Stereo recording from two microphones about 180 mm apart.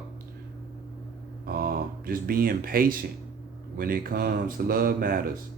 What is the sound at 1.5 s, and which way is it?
Speech, 50° right (ahead or behind).